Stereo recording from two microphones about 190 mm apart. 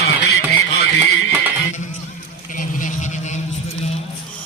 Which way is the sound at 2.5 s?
45° left (ahead or behind).